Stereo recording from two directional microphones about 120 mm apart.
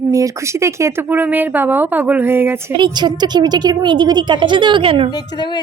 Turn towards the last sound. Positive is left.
turn(degrees=40)  # may be behind; listen again after turning